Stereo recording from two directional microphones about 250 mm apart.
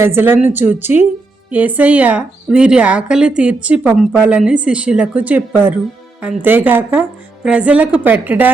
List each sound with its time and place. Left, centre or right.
0.0 s a woman's voice: centre